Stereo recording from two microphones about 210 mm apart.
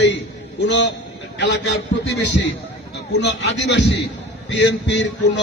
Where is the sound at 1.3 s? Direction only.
60° left (ahead or behind).